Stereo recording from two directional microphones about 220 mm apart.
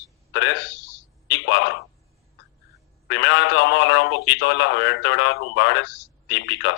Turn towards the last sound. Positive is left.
turn(degrees=55)  # may be behind; listen again after turning